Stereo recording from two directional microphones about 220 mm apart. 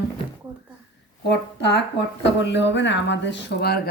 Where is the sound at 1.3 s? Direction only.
50° left (ahead or behind).